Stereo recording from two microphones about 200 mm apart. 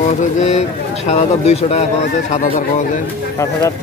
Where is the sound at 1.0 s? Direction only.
30° left (ahead or behind).